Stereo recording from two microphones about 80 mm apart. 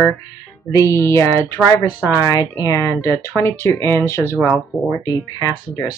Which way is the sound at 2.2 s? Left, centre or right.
Left.